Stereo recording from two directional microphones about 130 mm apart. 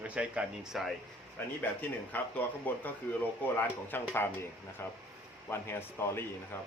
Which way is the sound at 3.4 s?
15° left (ahead or behind).